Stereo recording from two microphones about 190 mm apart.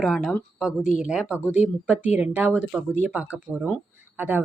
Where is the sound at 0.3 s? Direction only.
Centre (ahead or behind).